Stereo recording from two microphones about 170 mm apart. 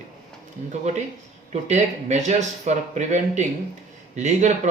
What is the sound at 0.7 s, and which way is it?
Speech, 40° right (ahead or behind).